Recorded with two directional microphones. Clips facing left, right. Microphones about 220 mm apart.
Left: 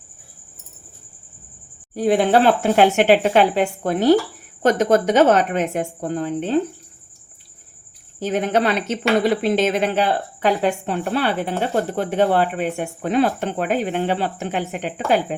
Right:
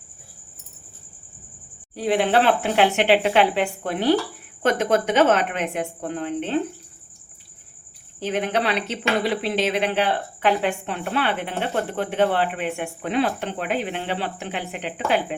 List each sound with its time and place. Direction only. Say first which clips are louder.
2.0 s a woman's voice: left 4 dB; 45° left (ahead or behind)
8.2 s speech: left 4 dB; 45° left (ahead or behind)